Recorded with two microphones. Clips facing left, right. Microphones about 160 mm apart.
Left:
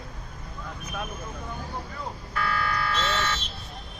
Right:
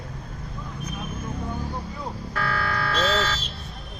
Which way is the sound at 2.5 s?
70° right (ahead or behind).